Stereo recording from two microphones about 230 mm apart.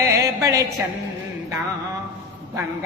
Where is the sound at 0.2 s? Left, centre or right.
Centre.